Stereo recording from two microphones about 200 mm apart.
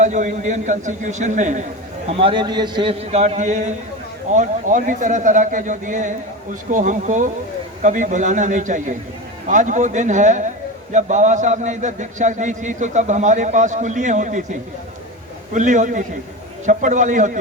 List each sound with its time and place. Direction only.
0.0 s a man's voice: 35° right (ahead or behind)
2.0 s a man's voice: 30° right (ahead or behind)
3.1 s a man's voice: 35° right (ahead or behind)
15.5 s a man's voice: 40° right (ahead or behind)